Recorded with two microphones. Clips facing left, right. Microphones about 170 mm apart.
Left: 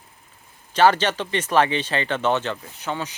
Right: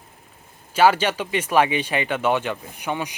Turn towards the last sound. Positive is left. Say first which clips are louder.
# right 2 dB
turn(degrees=-15)  # may be behind; listen again after turning